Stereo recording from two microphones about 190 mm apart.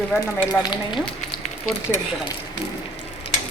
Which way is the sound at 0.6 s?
25° left (ahead or behind).